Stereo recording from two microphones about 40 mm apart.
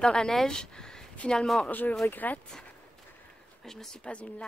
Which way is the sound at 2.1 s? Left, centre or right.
Left.